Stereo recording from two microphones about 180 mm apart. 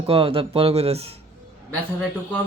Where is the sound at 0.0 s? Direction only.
30° right (ahead or behind).